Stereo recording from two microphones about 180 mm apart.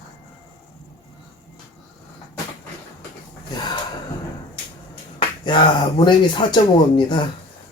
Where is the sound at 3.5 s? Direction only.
25° left (ahead or behind).